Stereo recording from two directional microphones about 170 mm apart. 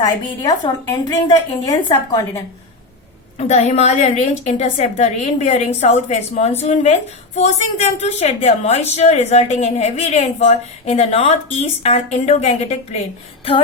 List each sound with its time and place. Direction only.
0.0 s a woman's voice: 25° left (ahead or behind)
3.3 s a woman's voice: 40° left (ahead or behind)